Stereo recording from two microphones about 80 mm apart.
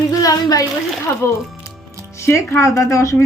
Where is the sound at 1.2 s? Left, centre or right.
Left.